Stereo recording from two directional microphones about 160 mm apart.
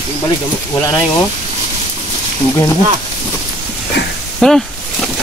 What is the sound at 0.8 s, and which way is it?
Speech, 20° left (ahead or behind).